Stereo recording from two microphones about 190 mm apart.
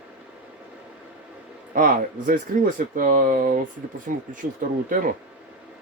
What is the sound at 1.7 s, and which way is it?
Speech, 45° right (ahead or behind).